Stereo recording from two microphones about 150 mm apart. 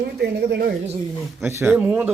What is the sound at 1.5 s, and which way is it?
Speech, 15° right (ahead or behind).